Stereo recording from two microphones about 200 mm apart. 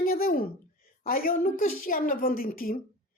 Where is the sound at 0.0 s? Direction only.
45° left (ahead or behind).